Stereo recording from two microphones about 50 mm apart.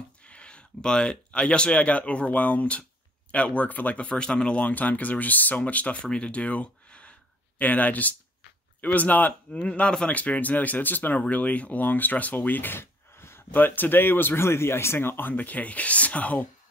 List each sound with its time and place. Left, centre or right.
0.2 s speech: left
9.5 s speech: left
13.5 s speech: left
15.3 s speech: left